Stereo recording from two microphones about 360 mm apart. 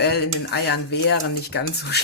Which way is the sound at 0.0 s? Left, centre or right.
Left.